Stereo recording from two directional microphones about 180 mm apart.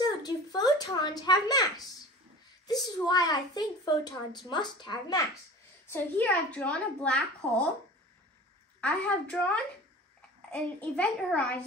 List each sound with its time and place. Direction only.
0.0 s a sound: 20° left (ahead or behind)
2.6 s a child's voice: 20° left (ahead or behind)
5.9 s a woman's voice: 10° left (ahead or behind)
8.8 s a woman's voice: 5° left (ahead or behind)